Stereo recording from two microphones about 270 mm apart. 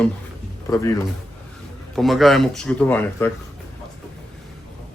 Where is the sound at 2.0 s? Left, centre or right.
Centre.